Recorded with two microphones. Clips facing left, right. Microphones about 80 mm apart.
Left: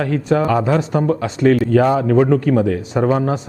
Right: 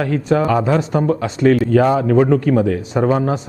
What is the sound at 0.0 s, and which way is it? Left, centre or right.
A man's voice, right.